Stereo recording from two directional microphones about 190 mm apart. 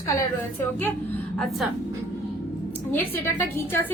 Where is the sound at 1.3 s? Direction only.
Centre (ahead or behind).